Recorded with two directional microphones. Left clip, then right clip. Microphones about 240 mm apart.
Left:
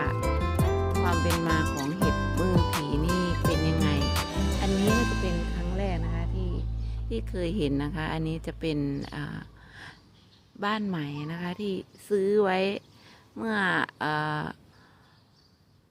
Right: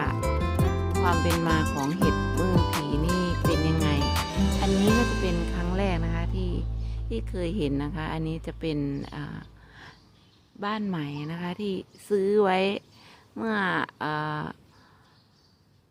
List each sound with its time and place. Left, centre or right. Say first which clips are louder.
0.2 s music: right 1 dB; centre
1.3 s a woman's voice: right 1 dB; centre
1.6 s music: right 2 dB; centre
5.7 s music: right 4 dB; right
7.1 s a woman's voice: even; centre